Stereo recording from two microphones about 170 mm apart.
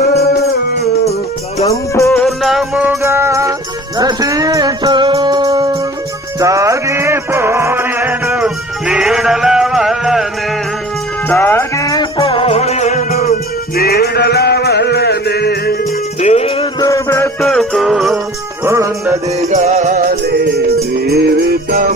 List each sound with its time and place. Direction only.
1.7 s music: 15° left (ahead or behind)
2.1 s music: centre (ahead or behind)
3.0 s music: 15° right (ahead or behind)
11.2 s music: 15° left (ahead or behind)
12.2 s music: 35° left (ahead or behind)
13.2 s music: 60° left (ahead or behind)
16.2 s music: 40° left (ahead or behind)
16.8 s music: 15° left (ahead or behind)
17.4 s music: centre (ahead or behind)
18.7 s music: 15° right (ahead or behind)
19.5 s music: 45° right (ahead or behind); by 21.9 s 60° right (ahead or behind)